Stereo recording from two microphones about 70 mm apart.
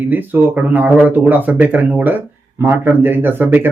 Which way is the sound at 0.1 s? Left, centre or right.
Right.